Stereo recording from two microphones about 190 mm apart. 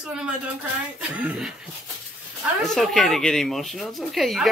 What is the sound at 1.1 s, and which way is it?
Speech, 5° right (ahead or behind).